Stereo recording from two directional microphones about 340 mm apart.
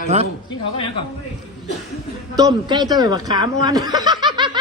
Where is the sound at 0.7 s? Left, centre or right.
Centre.